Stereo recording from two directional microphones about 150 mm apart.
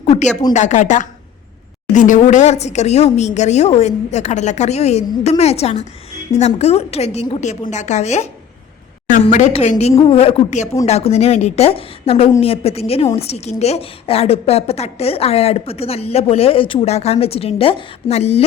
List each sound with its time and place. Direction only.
0.5 s a woman's voice: 50° left (ahead or behind)